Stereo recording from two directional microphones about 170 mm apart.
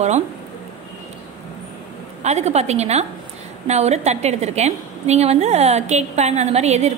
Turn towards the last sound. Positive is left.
turn(degrees=-40)  # may be behind; listen again after turning